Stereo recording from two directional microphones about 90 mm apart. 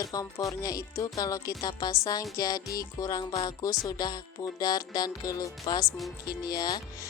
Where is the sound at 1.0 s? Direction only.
40° left (ahead or behind).